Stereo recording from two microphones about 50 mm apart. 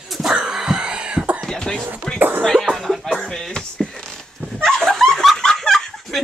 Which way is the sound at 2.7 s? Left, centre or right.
Centre.